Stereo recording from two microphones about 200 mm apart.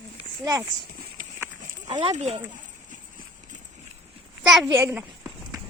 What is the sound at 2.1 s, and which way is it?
Speech, 35° right (ahead or behind).